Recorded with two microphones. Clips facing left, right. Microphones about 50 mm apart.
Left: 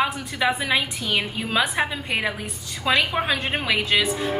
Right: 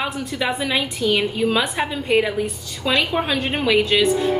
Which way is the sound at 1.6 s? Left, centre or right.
Left.